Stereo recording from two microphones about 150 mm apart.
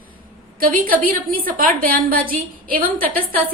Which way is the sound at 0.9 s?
70° right (ahead or behind).